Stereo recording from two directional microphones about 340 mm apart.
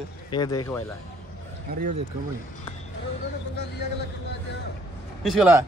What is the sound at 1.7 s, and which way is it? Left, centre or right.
Speech, right.